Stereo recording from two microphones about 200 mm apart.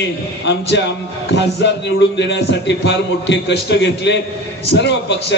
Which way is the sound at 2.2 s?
60° left (ahead or behind).